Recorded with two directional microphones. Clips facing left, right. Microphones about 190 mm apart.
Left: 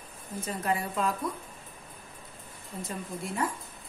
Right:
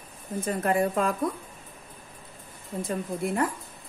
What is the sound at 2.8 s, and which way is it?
Speech, 55° right (ahead or behind).